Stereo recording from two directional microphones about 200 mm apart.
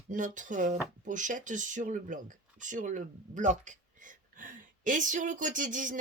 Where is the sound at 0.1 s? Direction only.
40° right (ahead or behind).